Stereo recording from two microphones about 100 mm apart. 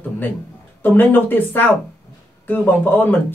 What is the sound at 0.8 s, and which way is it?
A man's voice, 20° left (ahead or behind).